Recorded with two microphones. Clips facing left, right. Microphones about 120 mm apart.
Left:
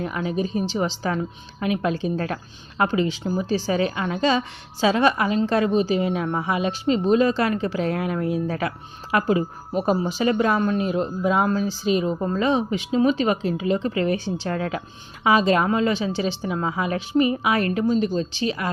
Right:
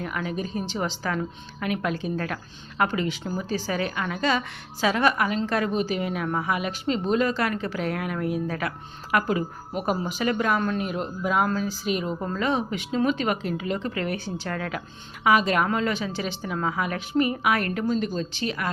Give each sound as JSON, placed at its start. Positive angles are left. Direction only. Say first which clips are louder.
{"t": 0.0, "sound": "speech", "louder": "left 4 dB", "side_deg": 25}